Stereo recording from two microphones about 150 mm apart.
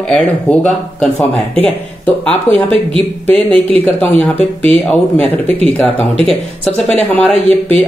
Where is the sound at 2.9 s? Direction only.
35° right (ahead or behind).